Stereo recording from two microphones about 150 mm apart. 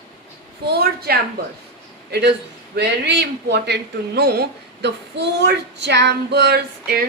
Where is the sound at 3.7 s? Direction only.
90° right.